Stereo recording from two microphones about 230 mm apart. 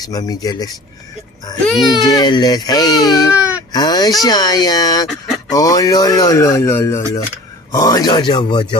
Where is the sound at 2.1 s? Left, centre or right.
Centre.